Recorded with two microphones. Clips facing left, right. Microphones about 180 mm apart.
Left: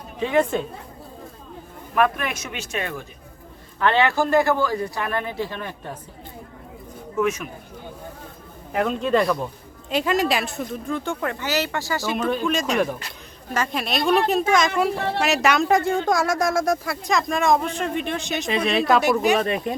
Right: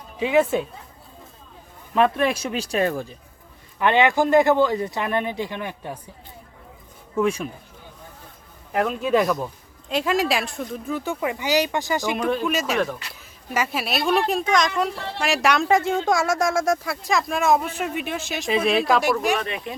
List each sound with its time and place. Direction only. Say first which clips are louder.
0.2 s a man's voice: right 1 dB; 10° right (ahead or behind)
2.0 s speech: right 2 dB; 30° right (ahead or behind)
3.8 s a man's voice: right 1 dB; 15° right (ahead or behind)
7.2 s speech: right 1 dB; 30° right (ahead or behind)
8.7 s speech: even; centre (ahead or behind); by 12.1 s 20° right (ahead or behind)
12.3 s speech: left 1 dB; 5° right (ahead or behind)
14.9 s speech: left 7 dB; 55° left (ahead or behind)
15.2 s speech: even; centre (ahead or behind)
19.4 s speech: left 6 dB; 40° left (ahead or behind)